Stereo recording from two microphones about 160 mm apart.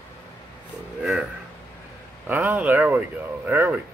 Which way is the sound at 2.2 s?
10° right (ahead or behind).